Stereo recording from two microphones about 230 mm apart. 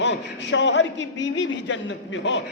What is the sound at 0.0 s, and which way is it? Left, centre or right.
A man's voice, left.